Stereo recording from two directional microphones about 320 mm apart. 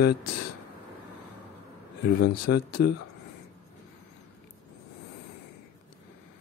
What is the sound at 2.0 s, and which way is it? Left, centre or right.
Speech, left.